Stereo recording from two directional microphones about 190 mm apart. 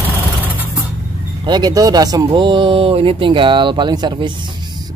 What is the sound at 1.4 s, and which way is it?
Speech, 20° right (ahead or behind).